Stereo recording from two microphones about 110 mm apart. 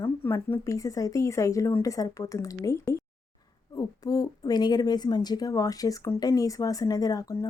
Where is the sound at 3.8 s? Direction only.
35° left (ahead or behind).